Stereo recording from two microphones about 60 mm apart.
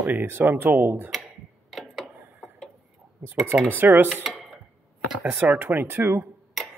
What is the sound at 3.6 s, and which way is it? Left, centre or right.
Speech, right.